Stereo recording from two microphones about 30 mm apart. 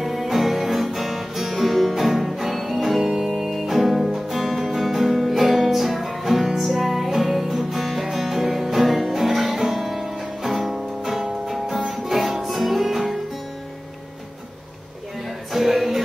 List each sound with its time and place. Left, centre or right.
0.0 s music: centre
3.0 s music: right
3.6 s music: centre
15.2 s music: centre